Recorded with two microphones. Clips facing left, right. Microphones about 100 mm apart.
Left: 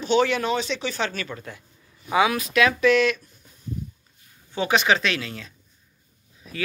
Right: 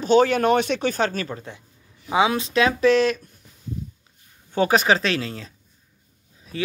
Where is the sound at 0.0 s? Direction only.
40° right (ahead or behind).